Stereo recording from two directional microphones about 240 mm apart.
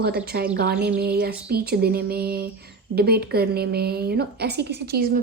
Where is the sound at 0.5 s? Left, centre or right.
Right.